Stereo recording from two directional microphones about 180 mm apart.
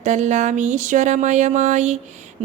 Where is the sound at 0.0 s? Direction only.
40° right (ahead or behind).